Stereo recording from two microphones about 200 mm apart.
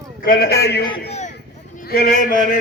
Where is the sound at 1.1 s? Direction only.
35° left (ahead or behind).